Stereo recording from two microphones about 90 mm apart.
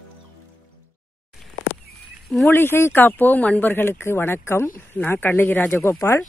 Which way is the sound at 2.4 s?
25° left (ahead or behind).